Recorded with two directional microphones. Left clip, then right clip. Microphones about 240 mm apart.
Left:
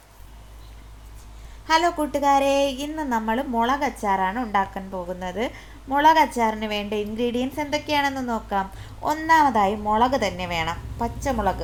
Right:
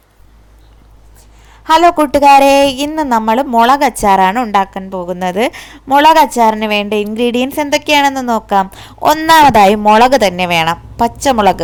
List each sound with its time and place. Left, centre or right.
1.6 s a woman's voice: right